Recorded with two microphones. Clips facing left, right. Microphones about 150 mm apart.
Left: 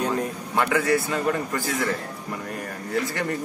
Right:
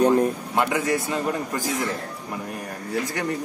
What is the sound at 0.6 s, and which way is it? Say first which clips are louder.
Speech: left 2 dB; 15° right (ahead or behind).